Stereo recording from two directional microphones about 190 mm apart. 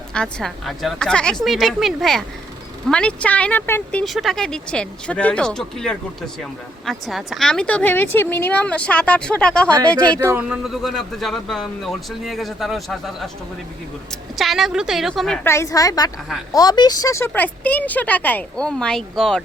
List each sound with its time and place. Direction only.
0.1 s a man's voice: 5° left (ahead or behind)
10.2 s a man's voice: 10° right (ahead or behind)
14.3 s a man's voice: centre (ahead or behind)
15.4 s speech: 15° left (ahead or behind)